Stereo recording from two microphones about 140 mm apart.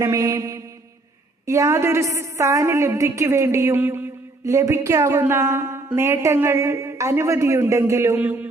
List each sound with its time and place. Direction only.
0.0 s a woman's voice: 25° right (ahead or behind)